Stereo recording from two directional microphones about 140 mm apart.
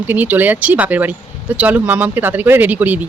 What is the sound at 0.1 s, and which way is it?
Speech, 15° right (ahead or behind).